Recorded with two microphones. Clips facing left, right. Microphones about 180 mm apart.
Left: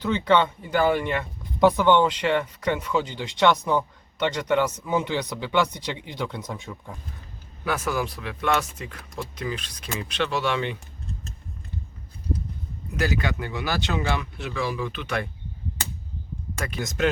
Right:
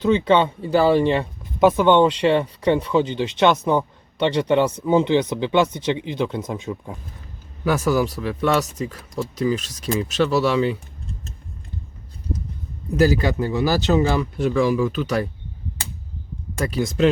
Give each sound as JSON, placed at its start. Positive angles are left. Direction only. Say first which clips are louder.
{"t": 0.0, "sound": "speech", "louder": "right 4 dB", "side_deg": -20}
{"t": 7.6, "sound": "speech", "louder": "right 7 dB", "side_deg": -40}
{"t": 13.0, "sound": "speech", "louder": "right 8 dB", "side_deg": -35}
{"t": 16.6, "sound": "speech", "louder": "right 7 dB", "side_deg": -35}